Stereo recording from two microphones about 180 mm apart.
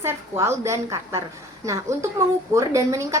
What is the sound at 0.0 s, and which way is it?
A woman's voice, 15° right (ahead or behind).